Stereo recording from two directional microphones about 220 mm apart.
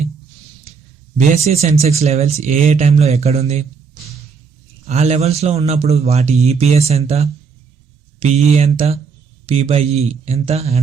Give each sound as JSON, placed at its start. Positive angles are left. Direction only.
{"t": 1.5, "sound": "speech", "side_deg": -30}
{"t": 4.9, "sound": "speech", "side_deg": -30}